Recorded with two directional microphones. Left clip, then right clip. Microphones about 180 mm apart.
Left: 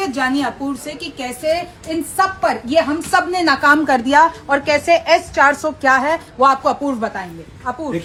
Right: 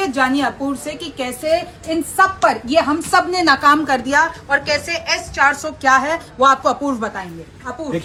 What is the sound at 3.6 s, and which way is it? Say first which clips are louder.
Speech: left 4 dB; 20° left (ahead or behind).